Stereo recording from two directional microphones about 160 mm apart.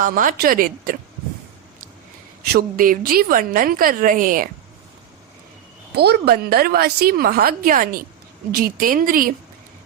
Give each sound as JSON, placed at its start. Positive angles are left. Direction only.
{"t": 0.0, "sound": "a woman's voice", "side_deg": -60}
{"t": 2.5, "sound": "a woman's voice", "side_deg": -65}
{"t": 5.9, "sound": "a woman's voice", "side_deg": -85}